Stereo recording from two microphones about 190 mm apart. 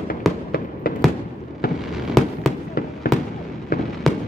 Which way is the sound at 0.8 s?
50° left (ahead or behind).